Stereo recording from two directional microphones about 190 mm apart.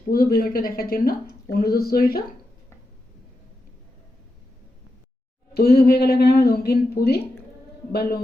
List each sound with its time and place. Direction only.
0.1 s a woman's voice: 50° left (ahead or behind)
5.5 s a woman's voice: 55° left (ahead or behind)